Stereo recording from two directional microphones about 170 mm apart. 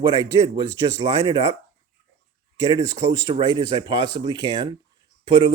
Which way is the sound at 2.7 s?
25° right (ahead or behind).